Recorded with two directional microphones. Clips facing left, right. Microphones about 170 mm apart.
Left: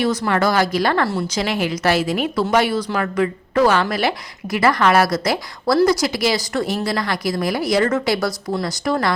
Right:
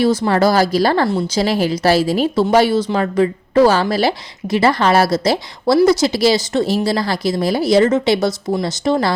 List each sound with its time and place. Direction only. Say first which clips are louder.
0.0 s a woman's voice: right 4 dB; 30° right (ahead or behind)